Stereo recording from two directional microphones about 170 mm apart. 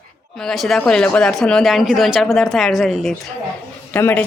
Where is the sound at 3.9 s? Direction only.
10° left (ahead or behind).